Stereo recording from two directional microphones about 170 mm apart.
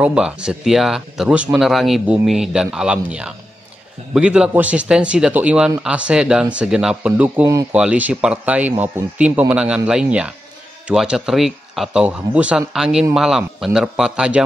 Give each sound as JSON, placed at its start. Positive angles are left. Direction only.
{"t": 0.0, "sound": "speech", "side_deg": -5}